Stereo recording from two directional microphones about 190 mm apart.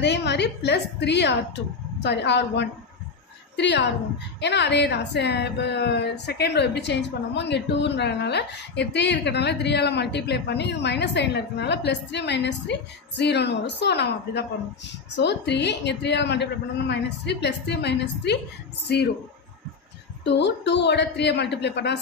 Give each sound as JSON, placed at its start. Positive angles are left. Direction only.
{"t": 0.0, "sound": "a woman's voice", "side_deg": 65}
{"t": 20.2, "sound": "a woman's voice", "side_deg": 65}